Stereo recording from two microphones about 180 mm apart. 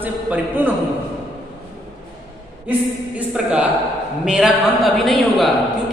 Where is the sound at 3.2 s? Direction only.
5° right (ahead or behind).